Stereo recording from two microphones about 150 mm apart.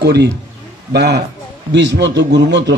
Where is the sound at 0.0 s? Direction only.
90° right.